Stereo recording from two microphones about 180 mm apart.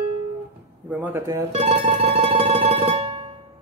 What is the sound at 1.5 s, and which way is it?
Music, 30° right (ahead or behind).